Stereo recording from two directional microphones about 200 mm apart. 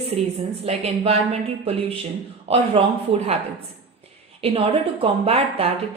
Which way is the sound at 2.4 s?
30° right (ahead or behind).